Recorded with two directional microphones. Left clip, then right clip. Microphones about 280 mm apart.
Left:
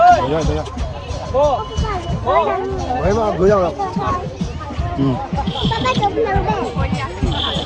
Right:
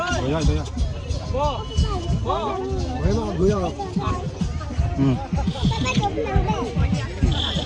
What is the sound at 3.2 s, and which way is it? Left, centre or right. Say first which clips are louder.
Speech: left 8 dB; left.